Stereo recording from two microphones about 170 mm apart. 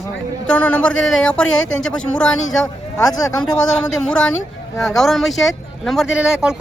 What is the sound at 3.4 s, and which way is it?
Speech, 5° left (ahead or behind).